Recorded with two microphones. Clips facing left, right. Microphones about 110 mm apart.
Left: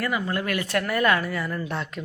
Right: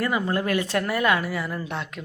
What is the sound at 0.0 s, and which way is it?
Speech, 25° right (ahead or behind).